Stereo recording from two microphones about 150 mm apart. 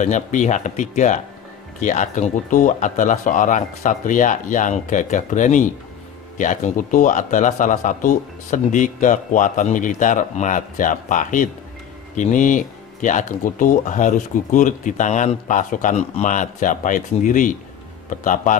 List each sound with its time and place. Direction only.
0.0 s speech: 55° left (ahead or behind)